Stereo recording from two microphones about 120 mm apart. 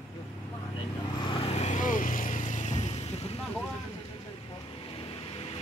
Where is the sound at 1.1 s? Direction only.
45° left (ahead or behind).